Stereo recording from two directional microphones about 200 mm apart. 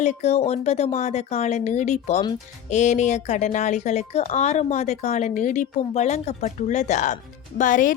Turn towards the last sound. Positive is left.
turn(degrees=40)  # may be behind; listen again after turning